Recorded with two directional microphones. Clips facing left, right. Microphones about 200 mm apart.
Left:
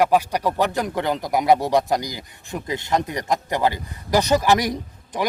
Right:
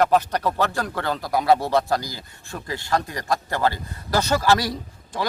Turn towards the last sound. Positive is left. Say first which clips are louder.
# left 3 dB
turn(degrees=15)  # may be behind; listen again after turning